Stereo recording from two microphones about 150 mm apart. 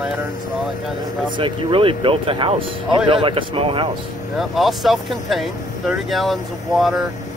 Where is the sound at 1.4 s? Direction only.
35° right (ahead or behind).